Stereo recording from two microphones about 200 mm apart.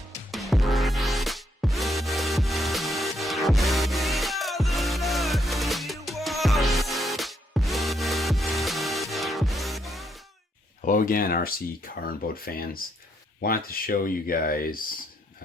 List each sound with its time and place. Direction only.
0.3 s music: centre (ahead or behind)
10.8 s speech: 40° left (ahead or behind)